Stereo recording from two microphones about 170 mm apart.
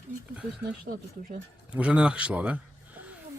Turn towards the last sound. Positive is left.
turn(degrees=-10)  # may be behind; listen again after turning